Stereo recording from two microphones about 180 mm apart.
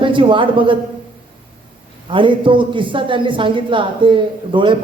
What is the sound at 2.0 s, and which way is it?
A woman's voice, 25° right (ahead or behind).